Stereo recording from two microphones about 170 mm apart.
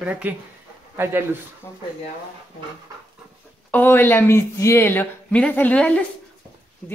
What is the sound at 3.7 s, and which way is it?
Speech, 10° left (ahead or behind).